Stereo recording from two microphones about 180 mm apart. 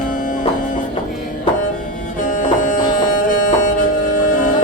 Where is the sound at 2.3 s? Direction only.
45° left (ahead or behind).